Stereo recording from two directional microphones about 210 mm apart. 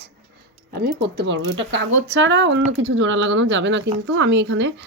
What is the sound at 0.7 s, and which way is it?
Speech, 45° right (ahead or behind).